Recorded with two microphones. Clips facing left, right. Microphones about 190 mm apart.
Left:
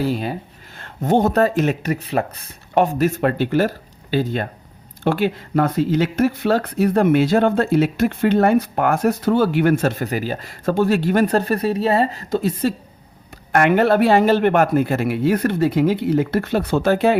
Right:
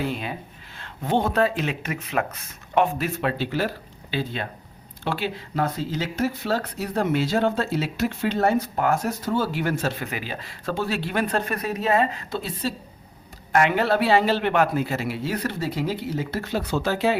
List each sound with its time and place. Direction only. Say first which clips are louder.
0.0 s speech: left 6 dB; 40° left (ahead or behind); by 17.2 s 55° left (ahead or behind)